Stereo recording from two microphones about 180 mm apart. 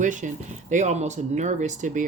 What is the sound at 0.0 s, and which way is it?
Speech, 45° right (ahead or behind).